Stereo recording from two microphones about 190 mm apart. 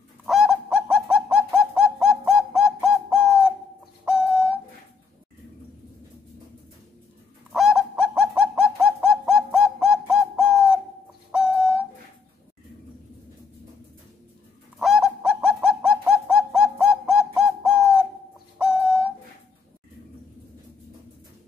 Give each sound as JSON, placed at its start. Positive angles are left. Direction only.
{"t": 0.3, "sound": "bird", "side_deg": 0}
{"t": 4.0, "sound": "owl", "side_deg": -5}
{"t": 7.5, "sound": "bird", "side_deg": 0}
{"t": 11.3, "sound": "owl", "side_deg": -5}
{"t": 14.8, "sound": "bird", "side_deg": 0}
{"t": 18.6, "sound": "owl", "side_deg": -5}